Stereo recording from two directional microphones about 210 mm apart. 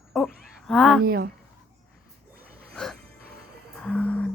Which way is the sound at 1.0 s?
45° right (ahead or behind).